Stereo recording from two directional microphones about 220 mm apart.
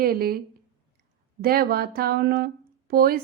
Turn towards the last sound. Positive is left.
turn(degrees=-45)  # may be behind; listen again after turning